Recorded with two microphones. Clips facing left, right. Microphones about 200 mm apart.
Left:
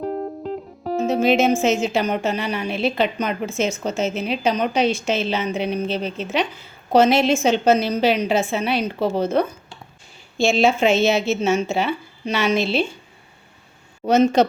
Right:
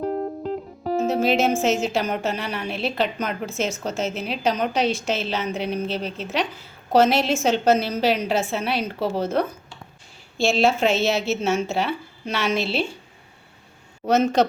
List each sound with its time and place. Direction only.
0.0 s music: centre (ahead or behind)
1.6 s a woman's voice: centre (ahead or behind)
14.1 s a woman's voice: centre (ahead or behind)